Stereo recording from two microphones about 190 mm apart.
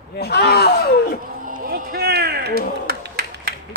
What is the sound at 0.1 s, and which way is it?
Speech, 60° left (ahead or behind).